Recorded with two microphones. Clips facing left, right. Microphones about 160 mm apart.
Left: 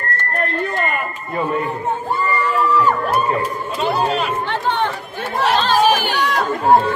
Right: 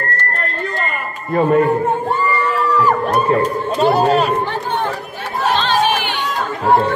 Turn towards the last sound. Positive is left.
turn(degrees=40)  # may be behind; listen again after turning